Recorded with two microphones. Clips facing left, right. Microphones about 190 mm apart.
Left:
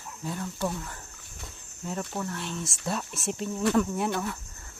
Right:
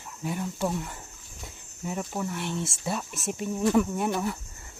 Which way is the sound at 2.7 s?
5° right (ahead or behind).